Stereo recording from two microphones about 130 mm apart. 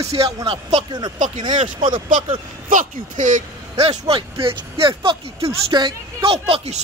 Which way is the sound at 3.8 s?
50° right (ahead or behind).